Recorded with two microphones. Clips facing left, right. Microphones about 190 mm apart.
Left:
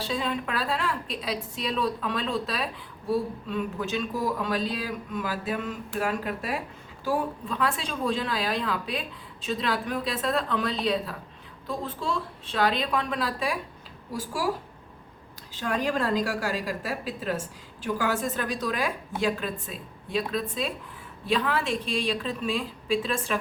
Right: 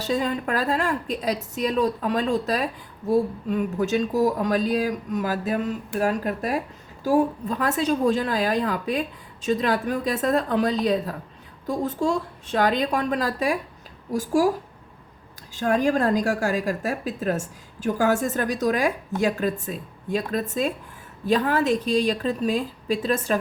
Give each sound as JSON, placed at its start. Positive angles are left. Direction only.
{"t": 0.0, "sound": "a woman's voice", "side_deg": -45}
{"t": 15.5, "sound": "a woman's voice", "side_deg": -45}